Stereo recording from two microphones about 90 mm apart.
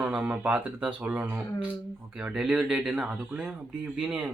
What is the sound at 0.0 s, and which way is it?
Speech, 10° right (ahead or behind).